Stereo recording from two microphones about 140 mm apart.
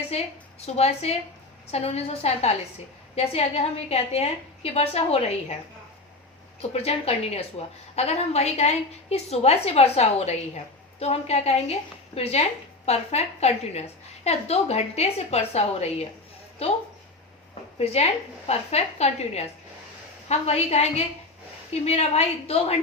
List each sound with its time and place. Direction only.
0.1 s a woman's voice: 50° left (ahead or behind)
6.6 s a woman's voice: 45° left (ahead or behind)
17.7 s a woman's voice: 50° left (ahead or behind)